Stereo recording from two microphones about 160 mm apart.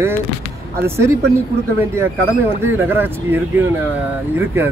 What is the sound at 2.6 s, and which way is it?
Speech, 15° right (ahead or behind).